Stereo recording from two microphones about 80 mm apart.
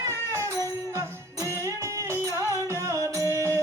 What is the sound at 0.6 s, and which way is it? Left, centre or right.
Music, right.